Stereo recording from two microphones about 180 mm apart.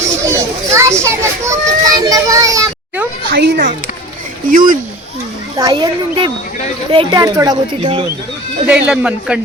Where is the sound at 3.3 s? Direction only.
65° right (ahead or behind).